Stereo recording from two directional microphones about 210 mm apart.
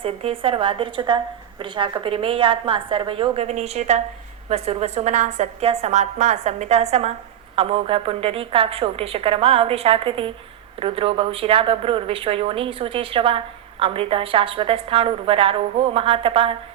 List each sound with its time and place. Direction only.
0.0 s a woman's voice: 25° right (ahead or behind)